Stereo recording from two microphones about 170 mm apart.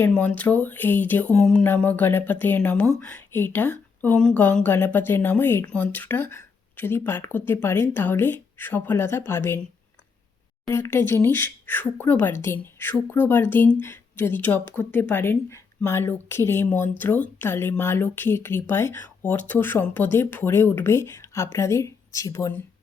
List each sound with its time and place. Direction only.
0.0 s speech: 10° left (ahead or behind)
10.7 s speech: 15° left (ahead or behind)